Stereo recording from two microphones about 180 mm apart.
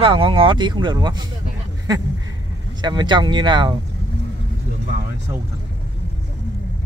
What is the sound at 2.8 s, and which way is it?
Speech, 25° right (ahead or behind).